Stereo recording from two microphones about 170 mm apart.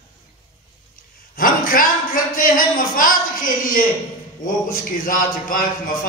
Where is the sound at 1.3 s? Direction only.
55° left (ahead or behind).